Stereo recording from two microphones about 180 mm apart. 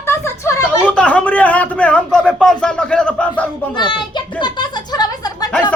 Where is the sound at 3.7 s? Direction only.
25° left (ahead or behind).